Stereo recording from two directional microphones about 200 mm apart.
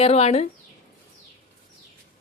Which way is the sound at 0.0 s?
30° left (ahead or behind).